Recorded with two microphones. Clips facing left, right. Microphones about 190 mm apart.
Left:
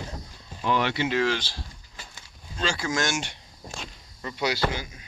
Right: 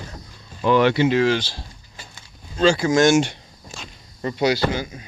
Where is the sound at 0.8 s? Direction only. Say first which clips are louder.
Right 10 dB; 45° right (ahead or behind).